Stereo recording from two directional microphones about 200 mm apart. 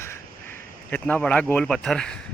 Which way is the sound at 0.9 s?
5° left (ahead or behind).